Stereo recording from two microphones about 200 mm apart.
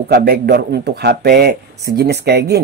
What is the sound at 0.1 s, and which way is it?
Speech, 55° right (ahead or behind).